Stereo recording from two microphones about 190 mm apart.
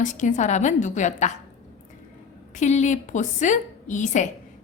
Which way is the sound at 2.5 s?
40° left (ahead or behind).